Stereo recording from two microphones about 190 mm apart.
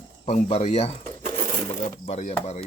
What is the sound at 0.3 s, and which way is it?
Speech, 35° left (ahead or behind).